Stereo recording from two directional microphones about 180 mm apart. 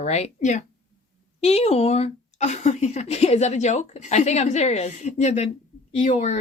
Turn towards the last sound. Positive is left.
turn(degrees=35)  # may be behind; listen again after turning